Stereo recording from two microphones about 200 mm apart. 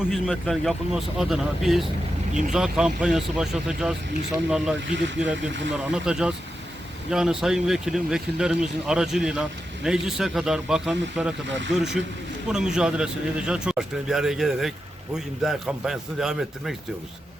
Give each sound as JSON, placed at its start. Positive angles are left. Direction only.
{"t": 0.1, "sound": "speech", "side_deg": 0}
{"t": 11.4, "sound": "speech", "side_deg": -65}
{"t": 12.5, "sound": "speech", "side_deg": -5}